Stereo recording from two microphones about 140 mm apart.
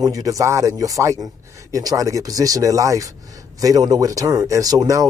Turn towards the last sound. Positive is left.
turn(degrees=-25)  # may be behind; listen again after turning